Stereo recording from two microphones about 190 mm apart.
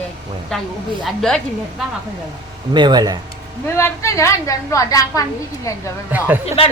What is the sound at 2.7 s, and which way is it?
Speech, 25° right (ahead or behind).